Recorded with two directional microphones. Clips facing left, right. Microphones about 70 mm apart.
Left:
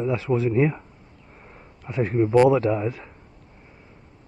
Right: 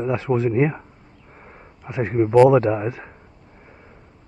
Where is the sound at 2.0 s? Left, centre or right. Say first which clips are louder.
Right 3 dB; right.